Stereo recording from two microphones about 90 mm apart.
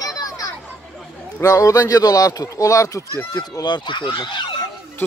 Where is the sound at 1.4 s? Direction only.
40° left (ahead or behind).